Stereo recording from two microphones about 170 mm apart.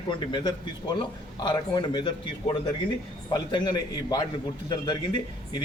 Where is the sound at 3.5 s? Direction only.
25° left (ahead or behind).